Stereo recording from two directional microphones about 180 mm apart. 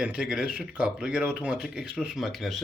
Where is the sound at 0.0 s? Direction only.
5° right (ahead or behind).